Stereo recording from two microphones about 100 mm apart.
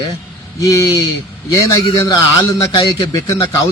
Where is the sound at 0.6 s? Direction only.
35° left (ahead or behind).